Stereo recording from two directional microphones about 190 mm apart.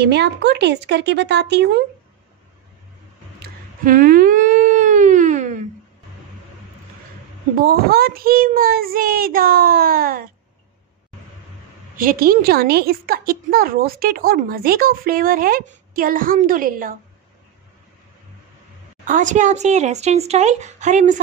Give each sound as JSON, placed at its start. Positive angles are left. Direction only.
{"t": 0.0, "sound": "speech", "side_deg": -60}
{"t": 3.3, "sound": "a sound", "side_deg": -50}
{"t": 7.5, "sound": "a woman's voice", "side_deg": -55}
{"t": 12.0, "sound": "a woman's voice", "side_deg": -50}
{"t": 19.0, "sound": "speech", "side_deg": -40}